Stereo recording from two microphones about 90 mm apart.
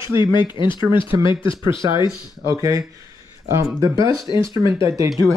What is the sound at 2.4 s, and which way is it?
Speech, 35° right (ahead or behind).